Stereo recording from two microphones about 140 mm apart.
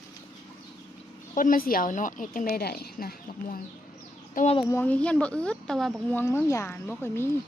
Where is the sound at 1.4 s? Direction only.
80° left.